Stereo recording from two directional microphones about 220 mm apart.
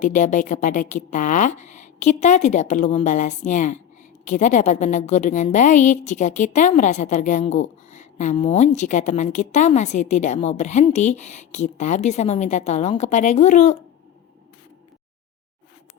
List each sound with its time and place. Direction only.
0.0 s a woman's voice: 35° left (ahead or behind)